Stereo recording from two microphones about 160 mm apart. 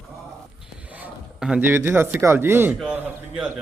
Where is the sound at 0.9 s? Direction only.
10° right (ahead or behind).